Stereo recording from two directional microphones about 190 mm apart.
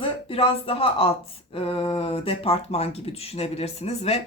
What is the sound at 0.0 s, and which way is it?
Speech, 30° left (ahead or behind).